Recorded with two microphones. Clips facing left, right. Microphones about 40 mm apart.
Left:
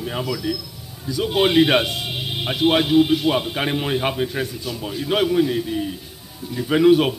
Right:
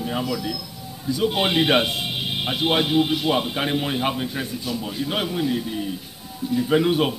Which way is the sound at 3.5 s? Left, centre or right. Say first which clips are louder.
Left 2 dB; centre.